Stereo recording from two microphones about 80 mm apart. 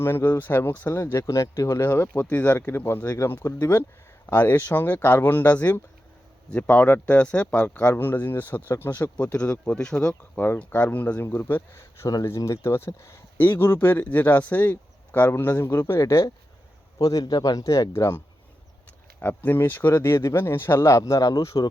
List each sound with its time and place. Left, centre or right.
0.0 s speech: left
17.0 s speech: left
17.6 s speech: left
19.4 s speech: left